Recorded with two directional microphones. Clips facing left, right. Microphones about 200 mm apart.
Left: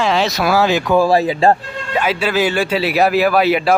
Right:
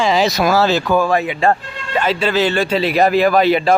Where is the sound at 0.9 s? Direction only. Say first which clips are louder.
Left 3 dB; 35° left (ahead or behind).